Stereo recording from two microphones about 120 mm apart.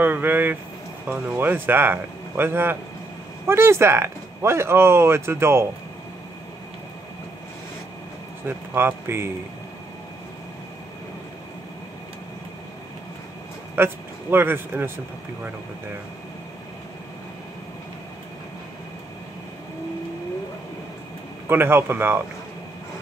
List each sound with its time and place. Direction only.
0.0 s a sound: 15° right (ahead or behind)
1.0 s a man's voice: 15° right (ahead or behind)
8.5 s speech: 20° right (ahead or behind)
13.7 s speech: 20° right (ahead or behind)
21.5 s a man's voice: 20° right (ahead or behind)